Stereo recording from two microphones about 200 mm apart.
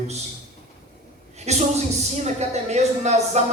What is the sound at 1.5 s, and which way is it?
A man's voice, 35° right (ahead or behind).